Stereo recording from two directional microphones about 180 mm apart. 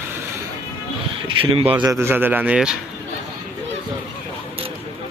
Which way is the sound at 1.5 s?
30° right (ahead or behind).